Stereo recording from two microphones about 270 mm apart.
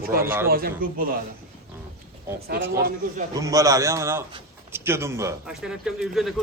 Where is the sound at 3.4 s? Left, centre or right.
Centre.